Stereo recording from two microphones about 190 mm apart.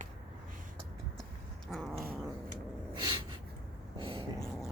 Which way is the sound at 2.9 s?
25° right (ahead or behind).